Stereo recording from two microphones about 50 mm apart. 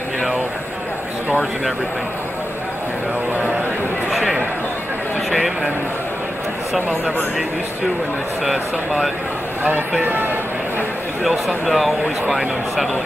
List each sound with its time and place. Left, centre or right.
4.1 s a sound: centre
5.3 s speech: centre
8.5 s speech: centre
9.6 s speech: right
11.2 s speech: centre